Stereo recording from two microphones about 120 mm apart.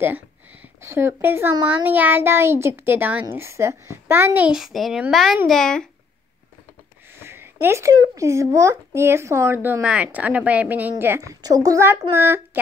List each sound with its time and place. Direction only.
0.0 s a child's voice: 15° right (ahead or behind)
4.6 s a child's voice: centre (ahead or behind)
7.1 s speech: 20° right (ahead or behind)